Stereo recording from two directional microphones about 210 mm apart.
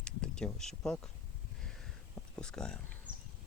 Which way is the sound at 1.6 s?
Centre (ahead or behind).